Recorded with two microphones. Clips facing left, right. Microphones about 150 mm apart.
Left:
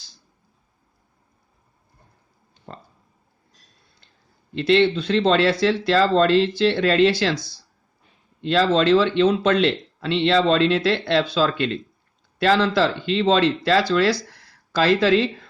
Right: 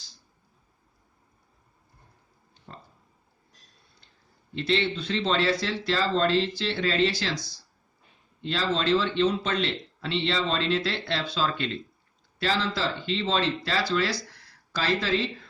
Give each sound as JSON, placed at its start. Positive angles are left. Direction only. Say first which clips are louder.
{"t": 2.7, "sound": "a sound", "louder": "left 6 dB", "side_deg": 65}
{"t": 4.5, "sound": "speech", "louder": "left 9 dB", "side_deg": 70}
{"t": 12.4, "sound": "speech", "louder": "left 9 dB", "side_deg": 65}